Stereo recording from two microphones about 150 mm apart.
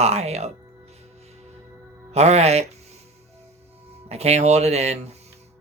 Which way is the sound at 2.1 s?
45° right (ahead or behind).